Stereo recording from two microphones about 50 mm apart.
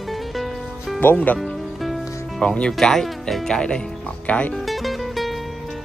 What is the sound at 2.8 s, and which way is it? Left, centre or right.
Speech, centre.